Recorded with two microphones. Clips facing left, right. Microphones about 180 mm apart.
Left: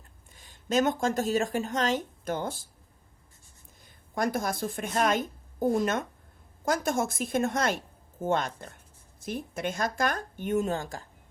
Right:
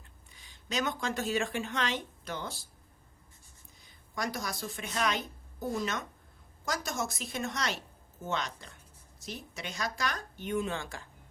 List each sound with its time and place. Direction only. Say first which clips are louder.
0.3 s speech: left 9 dB; 45° left (ahead or behind)
3.8 s a woman's voice: left 7 dB; 50° left (ahead or behind)